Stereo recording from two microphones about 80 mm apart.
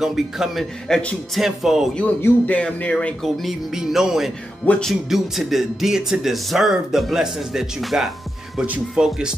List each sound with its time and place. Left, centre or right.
0.0 s speech: centre
0.8 s speech: centre
2.2 s music: left
3.4 s speech: centre